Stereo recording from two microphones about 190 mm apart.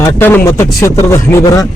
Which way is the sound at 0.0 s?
10° left (ahead or behind).